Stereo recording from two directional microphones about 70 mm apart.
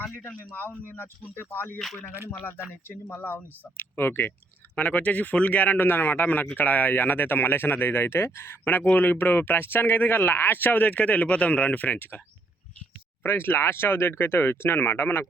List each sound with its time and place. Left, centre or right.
0.2 s speech: left
1.8 s speech: centre
2.3 s speech: left
4.7 s speech: left
13.2 s speech: left